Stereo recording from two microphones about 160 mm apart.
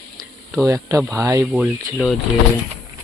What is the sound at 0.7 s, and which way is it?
Speech, 20° right (ahead or behind).